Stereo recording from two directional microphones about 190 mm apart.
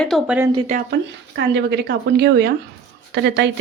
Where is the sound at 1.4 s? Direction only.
60° right (ahead or behind).